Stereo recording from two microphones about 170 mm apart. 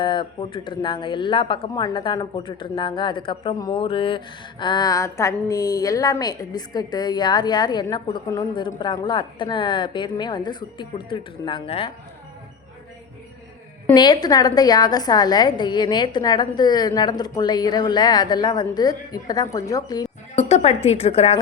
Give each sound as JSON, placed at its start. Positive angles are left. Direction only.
{"t": 0.0, "sound": "a woman's voice", "side_deg": 30}
{"t": 13.9, "sound": "a woman's voice", "side_deg": 25}
{"t": 20.3, "sound": "speech", "side_deg": 40}